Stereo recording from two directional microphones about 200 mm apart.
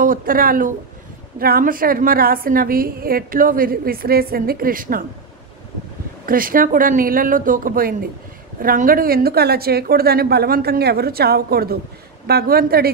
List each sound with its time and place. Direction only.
0.0 s a woman's voice: 45° right (ahead or behind)
6.2 s a woman's voice: 45° right (ahead or behind)